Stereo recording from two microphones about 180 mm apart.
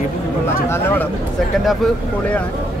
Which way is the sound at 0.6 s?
10° left (ahead or behind).